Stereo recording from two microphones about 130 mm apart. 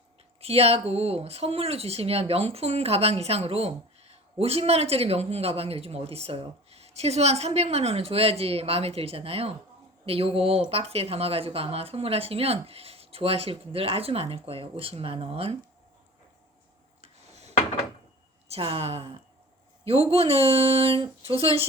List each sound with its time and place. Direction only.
0.4 s speech: 50° right (ahead or behind)
17.0 s rub: 55° right (ahead or behind)
18.4 s speech: 50° right (ahead or behind)